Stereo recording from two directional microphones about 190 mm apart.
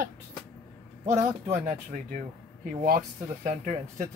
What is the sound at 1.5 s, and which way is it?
Speech, 45° right (ahead or behind).